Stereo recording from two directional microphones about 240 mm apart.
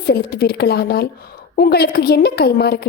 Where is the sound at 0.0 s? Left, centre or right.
Left.